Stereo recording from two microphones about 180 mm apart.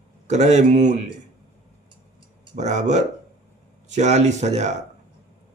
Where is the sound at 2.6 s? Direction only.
40° right (ahead or behind).